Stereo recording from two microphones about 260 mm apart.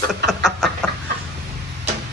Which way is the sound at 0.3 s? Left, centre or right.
Centre.